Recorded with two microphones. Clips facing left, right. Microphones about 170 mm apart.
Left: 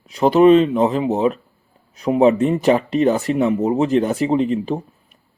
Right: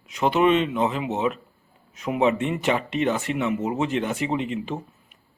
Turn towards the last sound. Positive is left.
turn(degrees=35)  # may be behind; listen again after turning